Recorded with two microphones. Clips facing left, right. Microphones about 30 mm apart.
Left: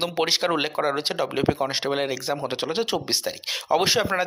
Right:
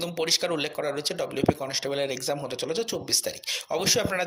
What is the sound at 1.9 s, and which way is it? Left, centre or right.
Speech, centre.